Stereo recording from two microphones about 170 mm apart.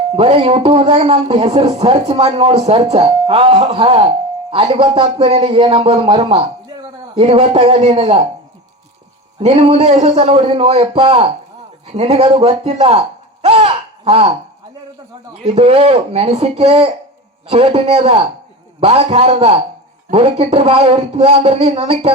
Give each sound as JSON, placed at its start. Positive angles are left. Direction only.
{"t": 0.2, "sound": "speech", "side_deg": -35}
{"t": 9.4, "sound": "speech", "side_deg": -35}
{"t": 15.4, "sound": "speech", "side_deg": -35}